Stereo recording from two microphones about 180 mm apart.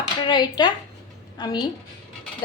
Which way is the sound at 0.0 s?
25° left (ahead or behind).